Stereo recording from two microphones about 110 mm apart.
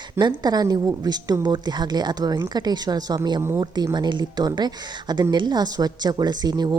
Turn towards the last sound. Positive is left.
turn(degrees=-40)  # may be behind; listen again after turning